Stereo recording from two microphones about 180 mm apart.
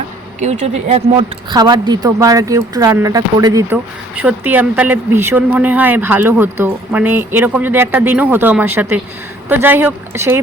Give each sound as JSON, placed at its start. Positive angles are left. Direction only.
{"t": 0.3, "sound": "speech", "side_deg": -40}
{"t": 4.1, "sound": "a man's voice", "side_deg": -10}